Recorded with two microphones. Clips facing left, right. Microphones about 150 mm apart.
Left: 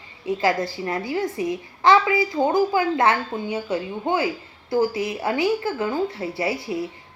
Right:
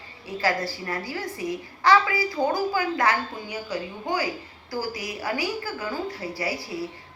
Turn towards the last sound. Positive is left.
turn(degrees=20)  # may be behind; listen again after turning